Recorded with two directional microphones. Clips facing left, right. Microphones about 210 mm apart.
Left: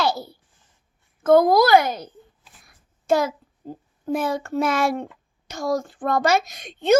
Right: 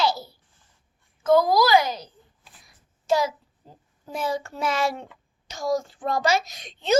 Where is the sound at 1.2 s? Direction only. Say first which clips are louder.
Left 4 dB; 55° left (ahead or behind).